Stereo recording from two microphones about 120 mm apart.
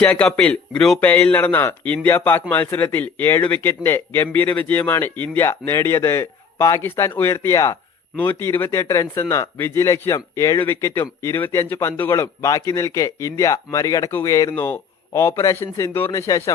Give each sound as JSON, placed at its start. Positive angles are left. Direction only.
{"t": 0.0, "sound": "speech", "side_deg": 15}
{"t": 8.1, "sound": "speech", "side_deg": 15}